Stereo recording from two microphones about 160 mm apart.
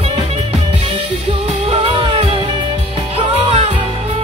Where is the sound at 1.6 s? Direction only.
35° right (ahead or behind).